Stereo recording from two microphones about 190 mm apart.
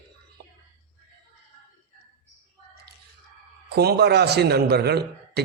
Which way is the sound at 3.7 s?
55° right (ahead or behind).